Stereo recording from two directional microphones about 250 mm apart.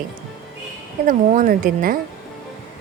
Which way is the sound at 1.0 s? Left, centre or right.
Right.